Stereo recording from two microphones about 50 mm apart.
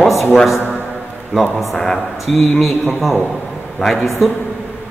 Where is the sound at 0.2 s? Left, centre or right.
Centre.